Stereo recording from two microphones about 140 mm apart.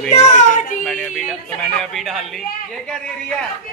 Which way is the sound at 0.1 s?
60° left (ahead or behind).